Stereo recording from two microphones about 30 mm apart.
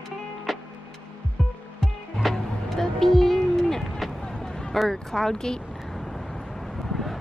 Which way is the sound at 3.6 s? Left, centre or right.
Centre.